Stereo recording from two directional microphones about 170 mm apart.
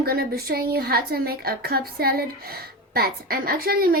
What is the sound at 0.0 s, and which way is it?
A woman's voice, 65° right (ahead or behind).